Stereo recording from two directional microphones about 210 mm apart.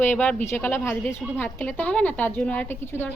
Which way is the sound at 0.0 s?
5° left (ahead or behind).